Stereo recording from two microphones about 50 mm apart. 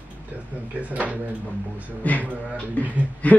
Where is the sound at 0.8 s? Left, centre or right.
Right.